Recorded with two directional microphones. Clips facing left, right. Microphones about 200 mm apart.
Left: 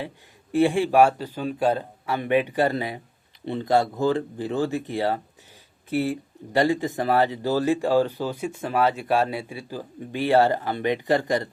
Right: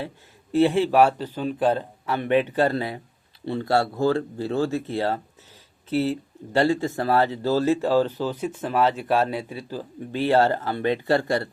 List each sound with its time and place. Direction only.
0.5 s speech: 15° left (ahead or behind)